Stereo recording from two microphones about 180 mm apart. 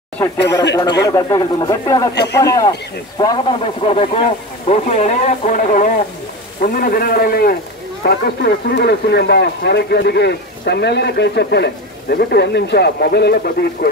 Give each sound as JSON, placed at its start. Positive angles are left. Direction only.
{"t": 0.2, "sound": "a man's voice", "side_deg": 15}
{"t": 8.0, "sound": "speech", "side_deg": 70}